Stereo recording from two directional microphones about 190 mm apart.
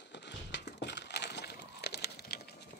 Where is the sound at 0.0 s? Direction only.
65° left (ahead or behind).